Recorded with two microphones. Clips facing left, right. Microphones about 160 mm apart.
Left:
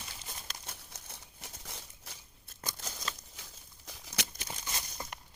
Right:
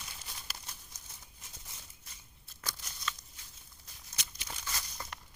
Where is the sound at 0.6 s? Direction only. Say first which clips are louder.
Left 4 dB; 60° left (ahead or behind); by 2.1 s 85° left.